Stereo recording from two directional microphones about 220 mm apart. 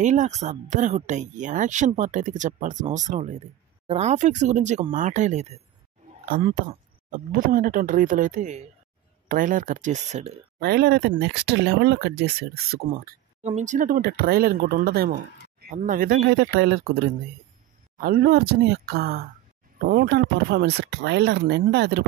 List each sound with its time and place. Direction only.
0.0 s speech: 35° right (ahead or behind)
10.6 s speech: 45° right (ahead or behind)
17.9 s speech: 40° right (ahead or behind)